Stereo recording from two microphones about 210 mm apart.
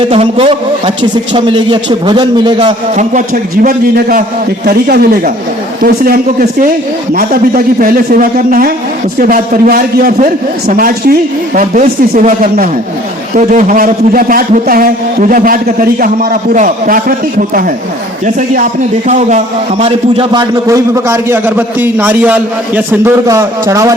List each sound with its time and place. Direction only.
0.1 s a man's voice: 25° right (ahead or behind)
2.9 s a man's voice: 35° right (ahead or behind)
19.0 s a man's voice: 35° right (ahead or behind)
19.8 s a man's voice: 25° right (ahead or behind)